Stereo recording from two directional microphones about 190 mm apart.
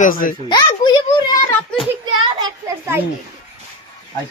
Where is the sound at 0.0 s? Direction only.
45° left (ahead or behind).